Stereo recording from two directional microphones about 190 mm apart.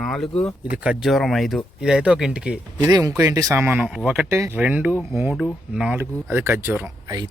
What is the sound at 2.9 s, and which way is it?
Speech, 20° right (ahead or behind).